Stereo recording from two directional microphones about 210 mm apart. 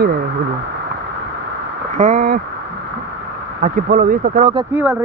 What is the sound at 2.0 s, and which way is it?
Speech, 35° right (ahead or behind).